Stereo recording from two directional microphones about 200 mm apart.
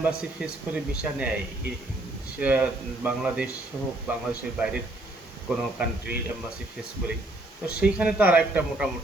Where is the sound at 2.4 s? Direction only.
5° right (ahead or behind).